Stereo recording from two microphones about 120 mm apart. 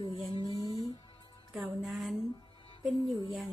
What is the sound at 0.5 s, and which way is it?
Music, 30° left (ahead or behind).